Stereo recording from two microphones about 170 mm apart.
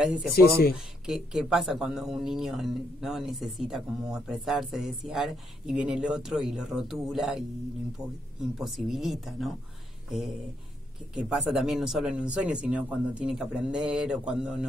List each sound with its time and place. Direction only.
0.0 s speech: centre (ahead or behind)
0.3 s speech: 65° left (ahead or behind)
0.7 s speech: 5° right (ahead or behind)
11.1 s speech: 5° right (ahead or behind)